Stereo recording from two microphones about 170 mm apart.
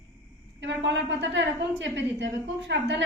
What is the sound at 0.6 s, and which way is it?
A woman's voice, 90° right.